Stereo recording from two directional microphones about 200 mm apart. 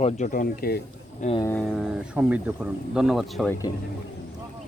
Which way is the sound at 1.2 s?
30° left (ahead or behind).